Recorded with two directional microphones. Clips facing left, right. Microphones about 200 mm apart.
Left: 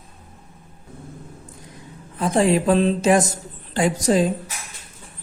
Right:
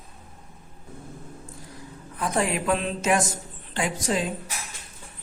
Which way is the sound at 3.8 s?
40° left (ahead or behind).